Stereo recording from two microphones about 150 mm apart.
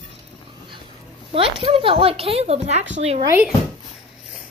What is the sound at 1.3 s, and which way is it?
A woman's voice, 35° right (ahead or behind).